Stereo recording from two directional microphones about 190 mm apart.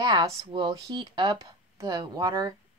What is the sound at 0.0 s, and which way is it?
A woman's voice, 25° right (ahead or behind).